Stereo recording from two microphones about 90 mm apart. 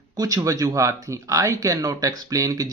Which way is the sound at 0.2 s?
40° right (ahead or behind).